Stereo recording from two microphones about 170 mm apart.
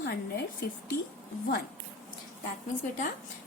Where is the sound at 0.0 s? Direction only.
65° left (ahead or behind).